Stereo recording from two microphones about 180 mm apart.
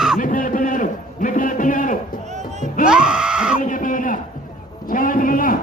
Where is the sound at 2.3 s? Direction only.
40° right (ahead or behind).